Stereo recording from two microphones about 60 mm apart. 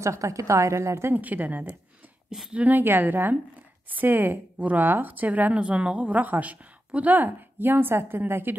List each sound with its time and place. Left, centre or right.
0.0 s a woman's voice: right
1.1 s a woman's voice: right
2.2 s speech: centre
2.5 s a woman's voice: right